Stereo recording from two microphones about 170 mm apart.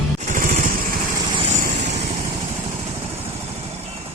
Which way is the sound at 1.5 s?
45° right (ahead or behind).